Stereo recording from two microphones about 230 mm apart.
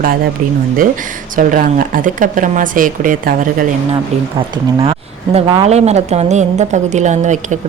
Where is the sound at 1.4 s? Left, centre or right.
Right.